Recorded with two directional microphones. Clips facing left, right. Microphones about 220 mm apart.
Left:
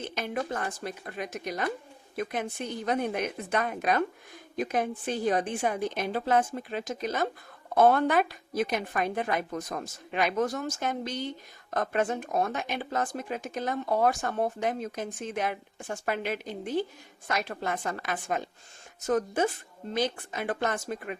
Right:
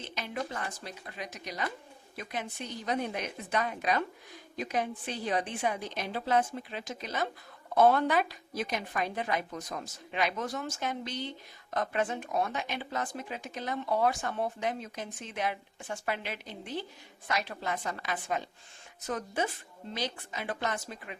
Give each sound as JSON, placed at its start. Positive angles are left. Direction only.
{"t": 0.0, "sound": "speech", "side_deg": 50}